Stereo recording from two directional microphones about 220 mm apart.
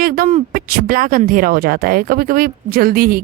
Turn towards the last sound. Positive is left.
turn(degrees=-40)  # may be behind; listen again after turning